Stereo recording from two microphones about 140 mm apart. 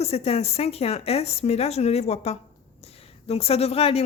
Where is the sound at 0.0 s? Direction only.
45° left (ahead or behind).